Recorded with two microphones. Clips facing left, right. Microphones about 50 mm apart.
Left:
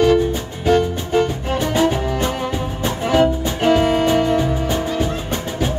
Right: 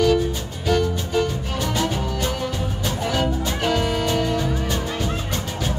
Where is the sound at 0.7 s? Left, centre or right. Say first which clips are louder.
Left 5 dB; left.